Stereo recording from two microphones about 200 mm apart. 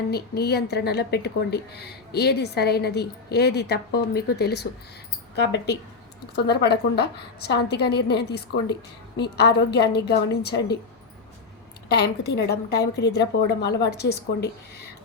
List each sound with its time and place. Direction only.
0.1 s a woman's voice: 55° left (ahead or behind)
11.9 s a woman's voice: 55° left (ahead or behind)